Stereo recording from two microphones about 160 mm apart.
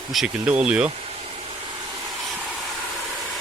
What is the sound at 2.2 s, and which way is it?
Vehicle, 5° right (ahead or behind).